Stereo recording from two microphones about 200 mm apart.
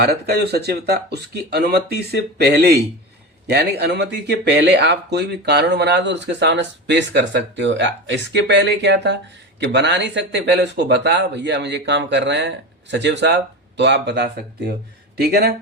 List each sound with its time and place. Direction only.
0.0 s speech: 55° right (ahead or behind)